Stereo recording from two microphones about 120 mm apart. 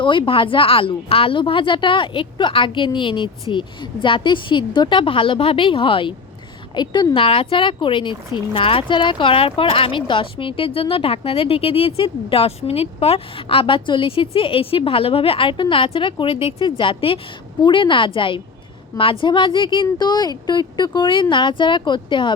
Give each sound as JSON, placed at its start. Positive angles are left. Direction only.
{"t": 0.0, "sound": "speech", "side_deg": 45}